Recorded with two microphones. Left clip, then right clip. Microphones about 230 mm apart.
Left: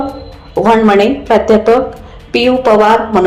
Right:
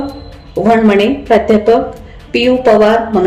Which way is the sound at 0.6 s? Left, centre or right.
Centre.